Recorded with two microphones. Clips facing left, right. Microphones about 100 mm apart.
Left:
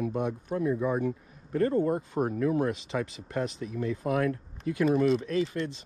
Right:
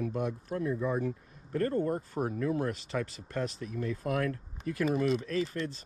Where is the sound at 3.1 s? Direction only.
45° right (ahead or behind).